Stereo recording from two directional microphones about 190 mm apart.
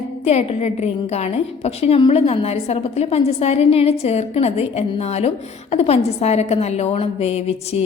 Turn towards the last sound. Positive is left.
turn(degrees=30)  # may be behind; listen again after turning